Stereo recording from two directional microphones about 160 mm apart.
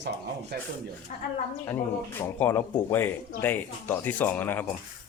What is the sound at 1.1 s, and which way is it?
Speech, 55° left (ahead or behind).